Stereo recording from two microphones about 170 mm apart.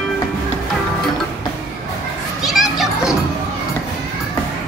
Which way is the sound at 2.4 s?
Centre (ahead or behind).